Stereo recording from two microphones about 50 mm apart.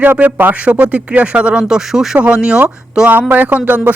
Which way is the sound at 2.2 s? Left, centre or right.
Right.